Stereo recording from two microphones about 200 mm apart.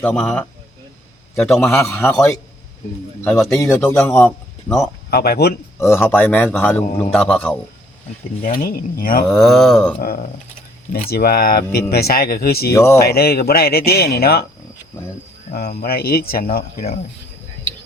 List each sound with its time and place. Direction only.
0.0 s a sound: 5° left (ahead or behind)
1.6 s a man's voice: 10° left (ahead or behind)
3.6 s a man's voice: 15° left (ahead or behind)
5.1 s speech: 50° left (ahead or behind)
5.8 s a man's voice: 10° left (ahead or behind)
7.1 s a sound: 5° left (ahead or behind)
8.4 s speech: 45° left (ahead or behind)
9.3 s a sound: centre (ahead or behind)
10.0 s speech: 45° left (ahead or behind)
12.7 s a man's voice: 15° left (ahead or behind)
13.0 s speech: 50° left (ahead or behind)
15.5 s speech: 50° left (ahead or behind)